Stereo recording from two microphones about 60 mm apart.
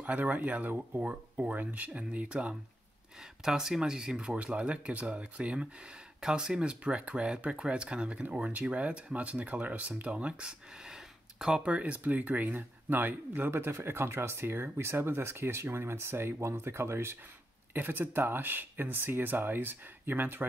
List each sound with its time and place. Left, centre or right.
0.0 s speech: right
3.2 s speech: centre; by 13.5 s right
13.5 s speech: right